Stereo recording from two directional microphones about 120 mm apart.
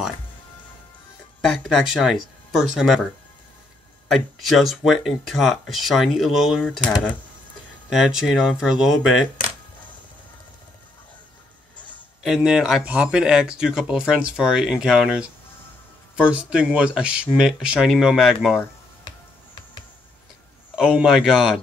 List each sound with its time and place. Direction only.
1.4 s speech: centre (ahead or behind)
4.1 s speech: centre (ahead or behind)
7.9 s speech: centre (ahead or behind)
12.2 s speech: 5° right (ahead or behind)
19.0 s music: 40° left (ahead or behind)
20.7 s speech: 5° right (ahead or behind)